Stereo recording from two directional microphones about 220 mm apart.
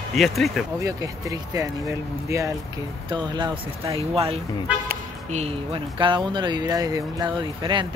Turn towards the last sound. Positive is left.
turn(degrees=-20)  # may be behind; listen again after turning